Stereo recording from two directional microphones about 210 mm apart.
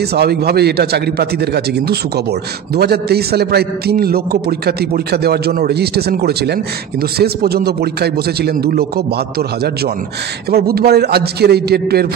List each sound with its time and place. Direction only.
0.1 s a man's voice: 50° right (ahead or behind)